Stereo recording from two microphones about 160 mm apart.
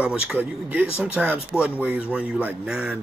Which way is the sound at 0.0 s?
10° right (ahead or behind).